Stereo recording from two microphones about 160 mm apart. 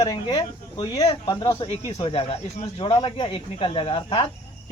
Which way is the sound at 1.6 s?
40° left (ahead or behind).